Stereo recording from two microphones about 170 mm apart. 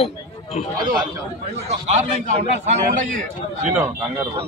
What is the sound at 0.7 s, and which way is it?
Speech, 25° right (ahead or behind).